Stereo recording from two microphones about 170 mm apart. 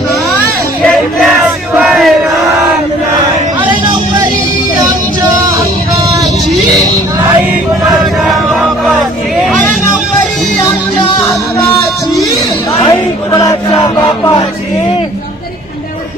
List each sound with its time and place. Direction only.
0.9 s battle cry: 5° right (ahead or behind)
7.9 s a sound: 5° right (ahead or behind)
12.9 s chant: 20° left (ahead or behind)